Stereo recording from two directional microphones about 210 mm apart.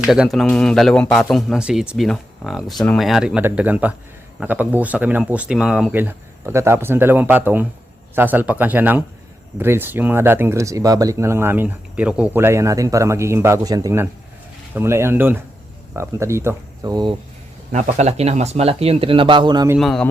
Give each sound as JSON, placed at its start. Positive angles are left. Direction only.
{"t": 0.0, "sound": "a man's voice", "side_deg": -5}
{"t": 17.7, "sound": "speech", "side_deg": -35}
{"t": 19.7, "sound": "a man's voice", "side_deg": 0}